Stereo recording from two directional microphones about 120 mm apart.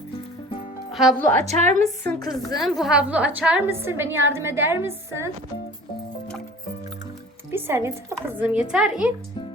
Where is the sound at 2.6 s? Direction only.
Centre (ahead or behind).